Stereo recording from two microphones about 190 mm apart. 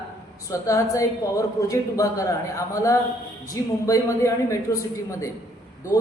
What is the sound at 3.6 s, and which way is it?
Speech, 20° left (ahead or behind).